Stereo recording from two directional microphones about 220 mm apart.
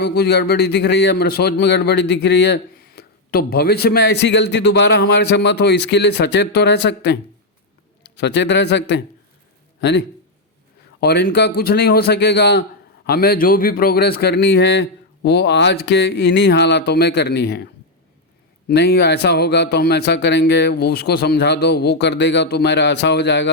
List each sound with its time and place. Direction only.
0.0 s a man's voice: 50° left (ahead or behind)
11.0 s a man's voice: 45° left (ahead or behind)
18.7 s a man's voice: 45° left (ahead or behind)